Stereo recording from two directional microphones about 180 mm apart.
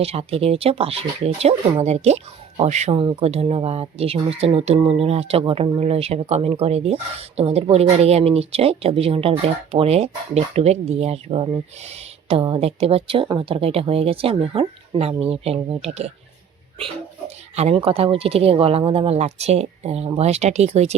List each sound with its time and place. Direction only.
0.0 s speech: 35° right (ahead or behind)